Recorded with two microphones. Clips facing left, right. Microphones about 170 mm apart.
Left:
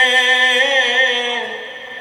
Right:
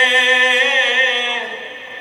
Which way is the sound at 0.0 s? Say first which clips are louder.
Right 1 dB; 35° left (ahead or behind).